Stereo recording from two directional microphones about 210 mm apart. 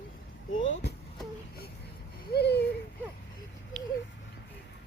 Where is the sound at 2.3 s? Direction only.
50° left (ahead or behind).